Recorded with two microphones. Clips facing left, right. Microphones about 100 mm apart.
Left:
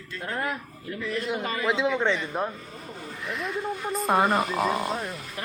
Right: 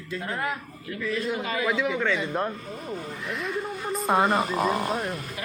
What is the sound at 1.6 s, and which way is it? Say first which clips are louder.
Speech: left 2 dB; 25° left (ahead or behind).